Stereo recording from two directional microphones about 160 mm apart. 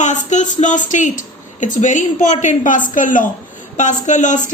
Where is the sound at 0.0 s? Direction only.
50° left (ahead or behind).